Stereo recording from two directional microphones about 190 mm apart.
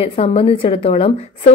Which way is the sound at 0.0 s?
30° left (ahead or behind).